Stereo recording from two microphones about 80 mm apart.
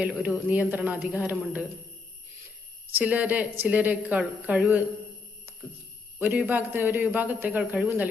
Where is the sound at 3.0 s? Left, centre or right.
Centre.